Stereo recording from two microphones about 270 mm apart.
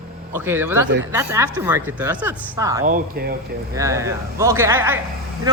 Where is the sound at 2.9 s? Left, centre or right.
Right.